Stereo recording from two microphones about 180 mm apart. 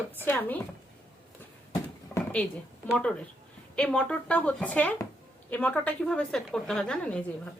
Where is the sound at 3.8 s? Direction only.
5° left (ahead or behind).